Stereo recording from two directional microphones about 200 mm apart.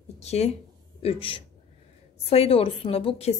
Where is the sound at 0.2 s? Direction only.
30° left (ahead or behind).